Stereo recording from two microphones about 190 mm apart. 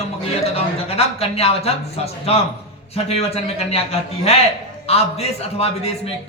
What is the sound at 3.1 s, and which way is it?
A man's voice, 30° left (ahead or behind).